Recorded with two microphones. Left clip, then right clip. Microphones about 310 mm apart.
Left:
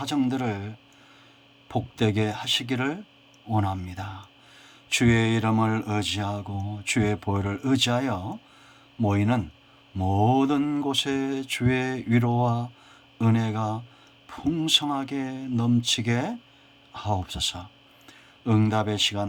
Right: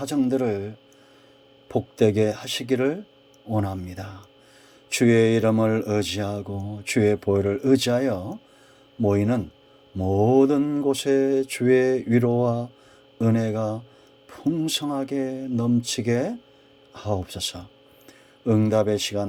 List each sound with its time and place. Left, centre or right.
0.0 s speech: centre
2.0 s speech: centre
18.6 s speech: centre